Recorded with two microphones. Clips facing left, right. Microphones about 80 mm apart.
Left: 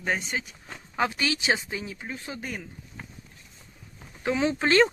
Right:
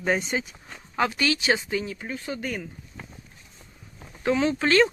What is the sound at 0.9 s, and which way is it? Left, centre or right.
Speech, centre.